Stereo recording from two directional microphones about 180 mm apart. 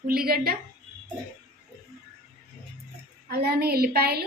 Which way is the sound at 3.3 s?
60° right (ahead or behind).